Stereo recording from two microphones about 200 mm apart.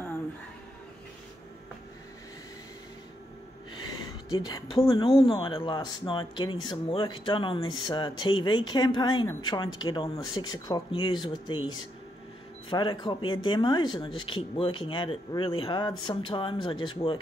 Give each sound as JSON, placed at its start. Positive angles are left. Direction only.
{"t": 4.3, "sound": "speech", "side_deg": 20}
{"t": 12.6, "sound": "speech", "side_deg": 25}